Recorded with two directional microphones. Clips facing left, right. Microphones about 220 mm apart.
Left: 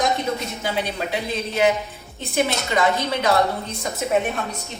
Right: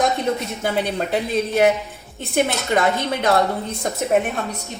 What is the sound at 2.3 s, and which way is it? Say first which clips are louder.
Speech: right 2 dB; 50° right (ahead or behind).